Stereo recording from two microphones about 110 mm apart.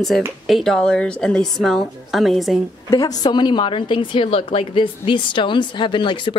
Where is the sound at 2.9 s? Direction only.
35° left (ahead or behind).